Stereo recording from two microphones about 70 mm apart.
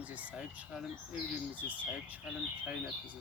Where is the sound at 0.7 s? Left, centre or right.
Centre.